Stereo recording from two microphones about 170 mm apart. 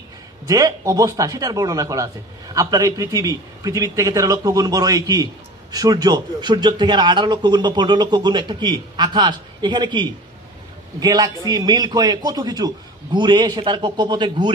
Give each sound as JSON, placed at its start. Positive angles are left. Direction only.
{"t": 0.5, "sound": "a man's voice", "side_deg": -20}